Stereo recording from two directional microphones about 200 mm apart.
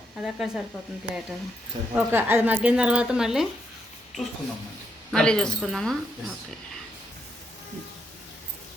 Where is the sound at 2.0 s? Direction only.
10° right (ahead or behind).